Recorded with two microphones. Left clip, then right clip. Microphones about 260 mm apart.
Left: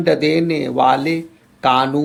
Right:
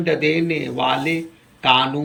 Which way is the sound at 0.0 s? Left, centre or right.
Centre.